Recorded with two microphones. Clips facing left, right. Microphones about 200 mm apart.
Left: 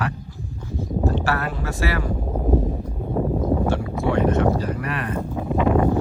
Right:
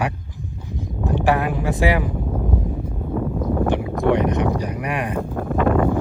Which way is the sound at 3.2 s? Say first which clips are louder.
Left 1 dB; 35° left (ahead or behind).